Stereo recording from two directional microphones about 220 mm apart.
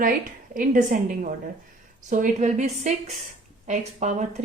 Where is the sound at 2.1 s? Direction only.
35° right (ahead or behind).